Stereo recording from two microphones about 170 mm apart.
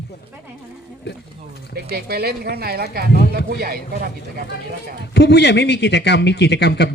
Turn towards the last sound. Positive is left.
turn(degrees=80)